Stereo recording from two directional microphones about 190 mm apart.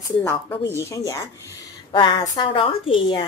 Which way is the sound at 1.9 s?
20° left (ahead or behind).